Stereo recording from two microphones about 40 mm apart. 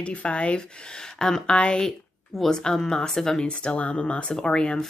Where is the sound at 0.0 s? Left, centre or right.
Left.